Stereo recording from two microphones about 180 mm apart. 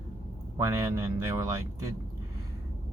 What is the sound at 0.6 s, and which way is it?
Speech, 15° right (ahead or behind).